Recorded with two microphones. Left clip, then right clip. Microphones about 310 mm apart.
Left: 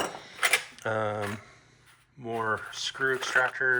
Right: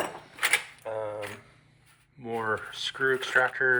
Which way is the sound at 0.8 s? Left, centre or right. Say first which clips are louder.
Left 4 dB; left.